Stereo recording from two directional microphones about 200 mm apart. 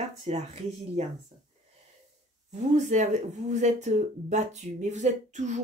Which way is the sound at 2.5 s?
35° right (ahead or behind).